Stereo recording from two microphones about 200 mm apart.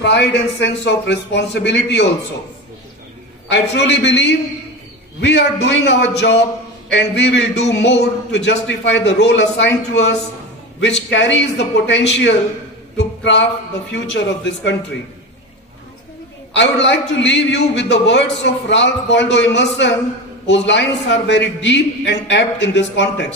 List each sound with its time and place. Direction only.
0.0 s a man's voice: 60° left (ahead or behind)
3.4 s a man's voice: 60° left (ahead or behind)
12.9 s a sound: 60° left (ahead or behind)
13.9 s a man's voice: 60° left (ahead or behind)
16.5 s a man's voice: 60° left (ahead or behind)